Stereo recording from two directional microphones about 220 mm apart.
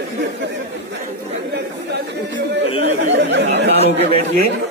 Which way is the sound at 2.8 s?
55° right (ahead or behind).